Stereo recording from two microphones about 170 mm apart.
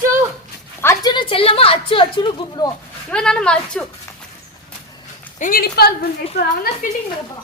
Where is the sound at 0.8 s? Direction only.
20° left (ahead or behind).